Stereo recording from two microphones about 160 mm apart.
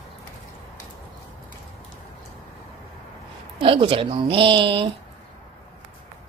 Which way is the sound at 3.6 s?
35° right (ahead or behind).